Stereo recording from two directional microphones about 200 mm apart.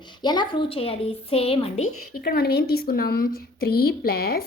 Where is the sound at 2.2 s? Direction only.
50° left (ahead or behind).